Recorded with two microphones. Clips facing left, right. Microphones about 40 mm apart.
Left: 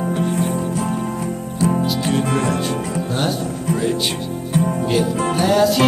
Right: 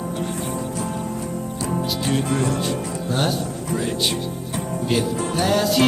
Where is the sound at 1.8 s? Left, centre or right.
Left.